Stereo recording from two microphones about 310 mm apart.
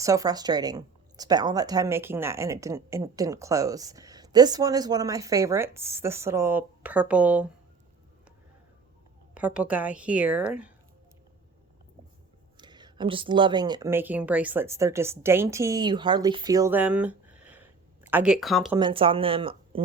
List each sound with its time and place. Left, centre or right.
0.0 s speech: centre
9.3 s a woman's voice: centre
12.5 s speech: centre
18.8 s speech: centre